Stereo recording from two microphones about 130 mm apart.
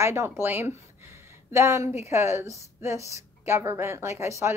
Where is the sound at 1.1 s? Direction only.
20° right (ahead or behind).